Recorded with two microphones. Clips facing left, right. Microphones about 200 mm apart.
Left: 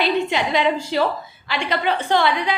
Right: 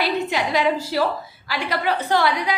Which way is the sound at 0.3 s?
5° right (ahead or behind).